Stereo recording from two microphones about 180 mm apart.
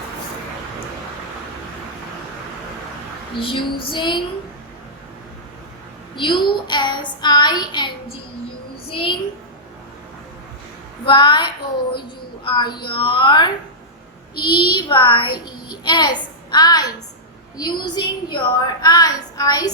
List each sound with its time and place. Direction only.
3.4 s a woman's voice: 30° left (ahead or behind)
6.1 s a woman's voice: 25° left (ahead or behind)
8.9 s a sound: 30° left (ahead or behind)
11.0 s a woman's voice: 25° left (ahead or behind)
12.5 s a woman's voice: 25° left (ahead or behind)